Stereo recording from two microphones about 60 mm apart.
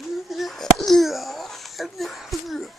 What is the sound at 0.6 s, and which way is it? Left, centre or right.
A child's voice, centre.